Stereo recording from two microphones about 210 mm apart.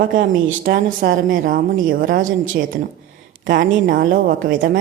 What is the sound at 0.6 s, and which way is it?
A woman's voice, 45° right (ahead or behind).